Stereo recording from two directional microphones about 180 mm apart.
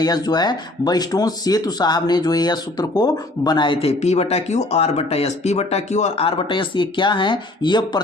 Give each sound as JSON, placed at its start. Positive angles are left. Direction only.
{"t": 0.0, "sound": "speech", "side_deg": 20}